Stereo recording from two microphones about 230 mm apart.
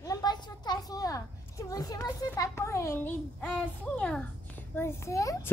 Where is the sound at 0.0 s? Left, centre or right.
Centre.